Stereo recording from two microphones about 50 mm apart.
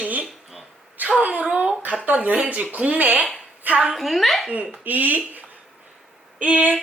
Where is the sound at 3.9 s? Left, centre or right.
Centre.